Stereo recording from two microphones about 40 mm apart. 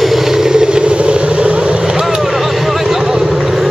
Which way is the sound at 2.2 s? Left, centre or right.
Centre.